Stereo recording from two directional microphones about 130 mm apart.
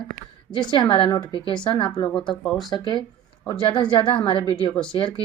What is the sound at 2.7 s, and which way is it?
Female singing, 35° left (ahead or behind).